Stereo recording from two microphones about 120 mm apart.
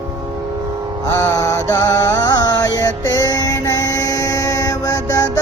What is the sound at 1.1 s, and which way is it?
Mantra, 25° left (ahead or behind).